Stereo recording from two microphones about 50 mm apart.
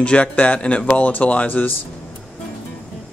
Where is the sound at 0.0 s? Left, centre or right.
Left.